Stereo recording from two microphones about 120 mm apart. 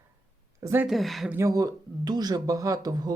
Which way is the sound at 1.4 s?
30° right (ahead or behind).